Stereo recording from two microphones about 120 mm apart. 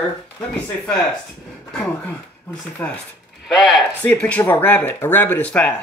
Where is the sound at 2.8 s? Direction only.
15° left (ahead or behind).